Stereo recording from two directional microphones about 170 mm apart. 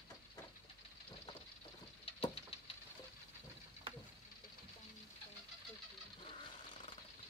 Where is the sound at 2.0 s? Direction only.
35° left (ahead or behind).